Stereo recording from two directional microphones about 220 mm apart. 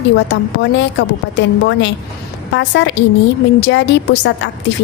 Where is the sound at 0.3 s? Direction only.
55° left (ahead or behind).